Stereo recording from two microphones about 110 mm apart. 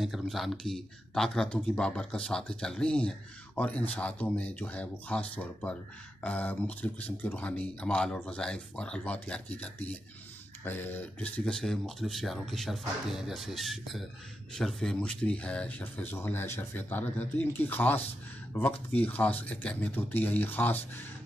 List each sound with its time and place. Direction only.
0.0 s speech: centre (ahead or behind); by 20.8 s 15° left (ahead or behind)